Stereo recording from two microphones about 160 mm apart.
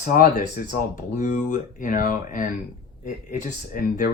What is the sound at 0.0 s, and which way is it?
Speech, 60° left (ahead or behind).